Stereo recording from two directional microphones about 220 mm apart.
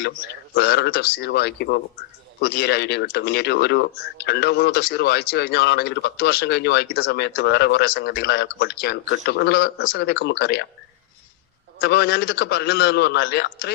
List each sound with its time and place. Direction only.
0.5 s speech: 45° left (ahead or behind)
11.8 s speech: 45° left (ahead or behind)